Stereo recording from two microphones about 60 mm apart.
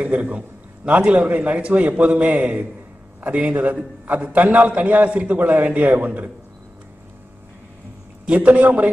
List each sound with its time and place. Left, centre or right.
0.0 s a man's voice: right
8.3 s a man's voice: right